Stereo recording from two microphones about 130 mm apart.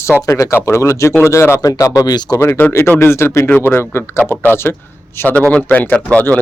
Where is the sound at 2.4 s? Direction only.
15° left (ahead or behind).